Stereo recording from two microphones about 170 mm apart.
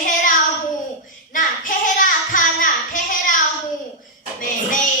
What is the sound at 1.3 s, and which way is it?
Child singing, 50° left (ahead or behind).